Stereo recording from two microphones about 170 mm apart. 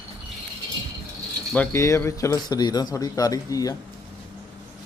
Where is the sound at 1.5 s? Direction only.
15° left (ahead or behind).